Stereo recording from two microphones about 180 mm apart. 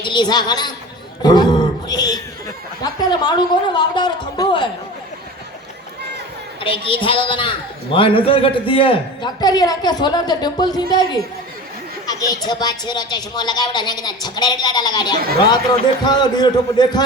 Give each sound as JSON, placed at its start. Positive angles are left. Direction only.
{"t": 0.0, "sound": "a man's voice", "side_deg": 25}
{"t": 1.2, "sound": "roaring cats", "side_deg": 25}
{"t": 2.8, "sound": "a man's voice", "side_deg": 25}
{"t": 6.6, "sound": "a man's voice", "side_deg": 30}